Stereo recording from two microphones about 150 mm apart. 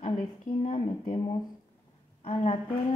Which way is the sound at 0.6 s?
40° left (ahead or behind).